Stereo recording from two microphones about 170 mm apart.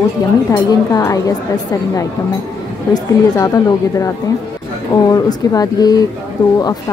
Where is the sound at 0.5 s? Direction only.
20° left (ahead or behind).